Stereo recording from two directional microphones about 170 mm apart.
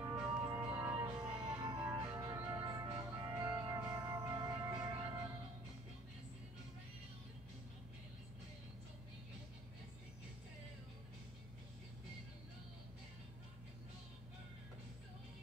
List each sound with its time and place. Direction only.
0.1 s music: 5° right (ahead or behind); by 4.9 s 25° right (ahead or behind)